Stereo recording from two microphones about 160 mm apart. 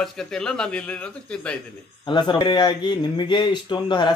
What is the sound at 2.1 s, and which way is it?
Speech, 30° left (ahead or behind).